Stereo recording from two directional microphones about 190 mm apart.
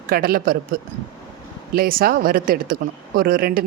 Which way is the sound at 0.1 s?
50° right (ahead or behind).